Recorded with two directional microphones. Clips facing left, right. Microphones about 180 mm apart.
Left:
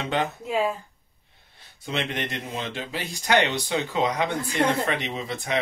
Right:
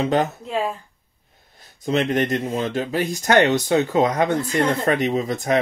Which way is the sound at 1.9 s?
40° right (ahead or behind).